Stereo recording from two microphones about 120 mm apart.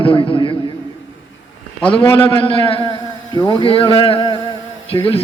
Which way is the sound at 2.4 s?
50° left (ahead or behind).